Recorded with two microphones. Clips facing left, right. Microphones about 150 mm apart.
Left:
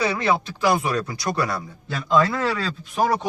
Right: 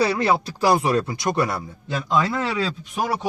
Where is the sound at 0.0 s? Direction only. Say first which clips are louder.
Right 2 dB; 35° right (ahead or behind).